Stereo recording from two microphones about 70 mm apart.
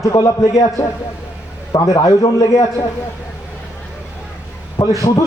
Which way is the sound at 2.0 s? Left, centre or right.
Left.